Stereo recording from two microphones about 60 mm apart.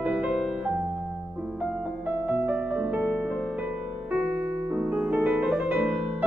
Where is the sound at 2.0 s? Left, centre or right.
Right.